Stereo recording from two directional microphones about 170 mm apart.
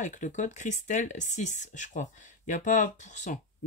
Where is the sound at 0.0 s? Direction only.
50° left (ahead or behind).